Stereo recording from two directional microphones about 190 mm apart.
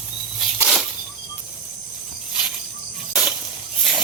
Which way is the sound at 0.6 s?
Centre (ahead or behind).